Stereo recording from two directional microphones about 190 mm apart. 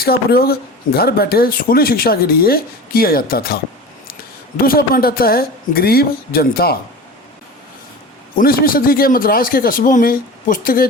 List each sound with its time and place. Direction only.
0.0 s speech: 55° left (ahead or behind)
8.4 s speech: 50° left (ahead or behind)